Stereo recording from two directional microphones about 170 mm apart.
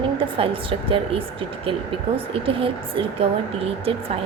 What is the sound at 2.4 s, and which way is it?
A woman's voice, 30° right (ahead or behind).